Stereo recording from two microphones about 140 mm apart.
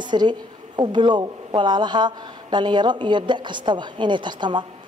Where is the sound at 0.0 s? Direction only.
30° right (ahead or behind).